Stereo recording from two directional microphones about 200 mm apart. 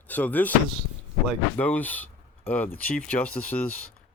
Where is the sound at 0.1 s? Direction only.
10° left (ahead or behind).